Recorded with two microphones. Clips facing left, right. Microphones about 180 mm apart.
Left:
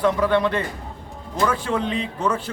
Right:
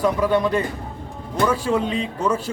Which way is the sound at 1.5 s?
5° right (ahead or behind).